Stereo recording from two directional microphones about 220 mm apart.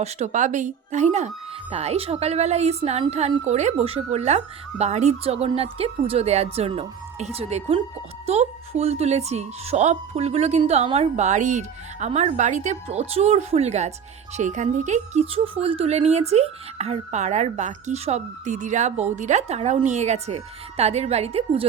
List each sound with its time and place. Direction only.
0.0 s a woman's voice: 30° right (ahead or behind)